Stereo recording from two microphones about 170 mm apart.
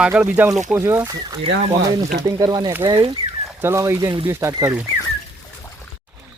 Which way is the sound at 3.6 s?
15° right (ahead or behind).